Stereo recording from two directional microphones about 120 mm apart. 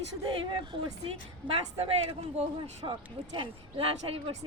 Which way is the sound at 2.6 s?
40° right (ahead or behind).